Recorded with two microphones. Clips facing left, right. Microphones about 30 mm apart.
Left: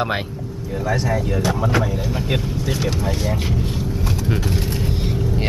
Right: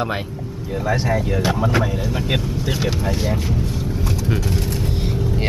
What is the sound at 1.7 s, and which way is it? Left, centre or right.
Speech, centre.